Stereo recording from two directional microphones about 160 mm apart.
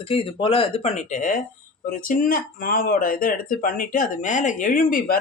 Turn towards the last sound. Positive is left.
turn(degrees=60)  # may be behind; listen again after turning